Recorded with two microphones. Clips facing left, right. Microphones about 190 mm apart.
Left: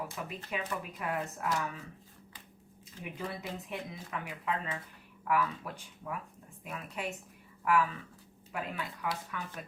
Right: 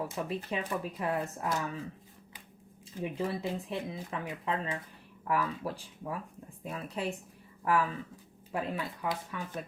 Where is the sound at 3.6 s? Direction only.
30° right (ahead or behind).